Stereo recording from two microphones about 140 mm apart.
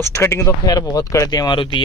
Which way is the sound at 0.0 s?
20° left (ahead or behind).